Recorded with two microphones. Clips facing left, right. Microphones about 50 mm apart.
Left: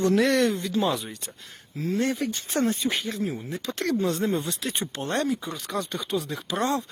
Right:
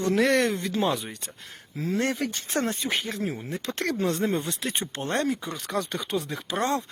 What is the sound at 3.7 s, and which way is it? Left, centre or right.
Speech, right.